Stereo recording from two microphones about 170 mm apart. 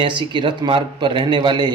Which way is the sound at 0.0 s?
25° right (ahead or behind).